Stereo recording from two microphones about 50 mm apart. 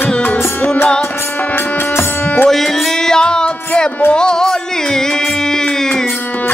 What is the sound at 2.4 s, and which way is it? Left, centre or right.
Music, centre.